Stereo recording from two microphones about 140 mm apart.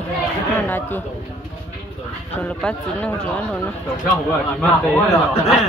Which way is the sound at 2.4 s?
10° left (ahead or behind).